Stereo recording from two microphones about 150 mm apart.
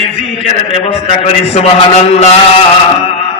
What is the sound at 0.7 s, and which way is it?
A man's voice, 40° left (ahead or behind).